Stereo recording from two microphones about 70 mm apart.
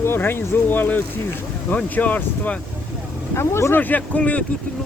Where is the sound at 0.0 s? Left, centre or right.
Left.